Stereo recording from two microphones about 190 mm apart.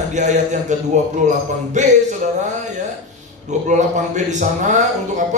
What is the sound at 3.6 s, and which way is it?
Speech, 40° right (ahead or behind).